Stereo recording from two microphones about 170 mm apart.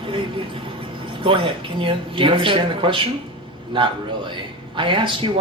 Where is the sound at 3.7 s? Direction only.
30° right (ahead or behind).